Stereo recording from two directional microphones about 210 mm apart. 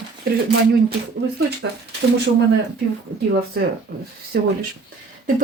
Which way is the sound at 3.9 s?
45° right (ahead or behind).